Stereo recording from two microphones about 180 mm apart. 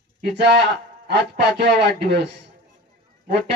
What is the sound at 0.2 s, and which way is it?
Speech, 75° right (ahead or behind).